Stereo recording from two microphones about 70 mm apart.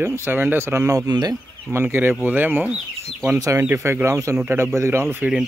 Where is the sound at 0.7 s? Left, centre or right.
Right.